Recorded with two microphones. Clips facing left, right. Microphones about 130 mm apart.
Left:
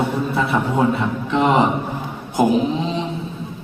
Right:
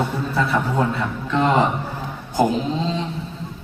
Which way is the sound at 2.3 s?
15° left (ahead or behind).